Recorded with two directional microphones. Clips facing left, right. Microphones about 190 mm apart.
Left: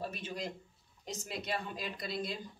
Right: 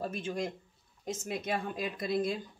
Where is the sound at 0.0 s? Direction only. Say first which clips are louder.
Right 5 dB; 50° right (ahead or behind).